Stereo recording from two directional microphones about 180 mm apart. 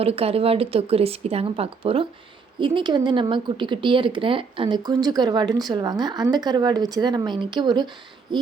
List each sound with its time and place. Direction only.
0.0 s speech: 30° right (ahead or behind)